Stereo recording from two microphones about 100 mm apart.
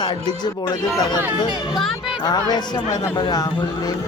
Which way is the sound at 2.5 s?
45° left (ahead or behind).